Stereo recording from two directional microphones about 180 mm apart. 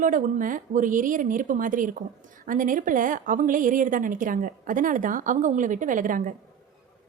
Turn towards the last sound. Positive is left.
turn(degrees=-50)  # may be behind; listen again after turning